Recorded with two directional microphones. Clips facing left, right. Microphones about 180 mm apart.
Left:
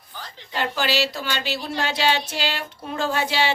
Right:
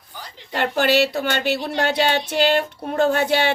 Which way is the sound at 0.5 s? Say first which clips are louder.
Right 6 dB; 60° right (ahead or behind).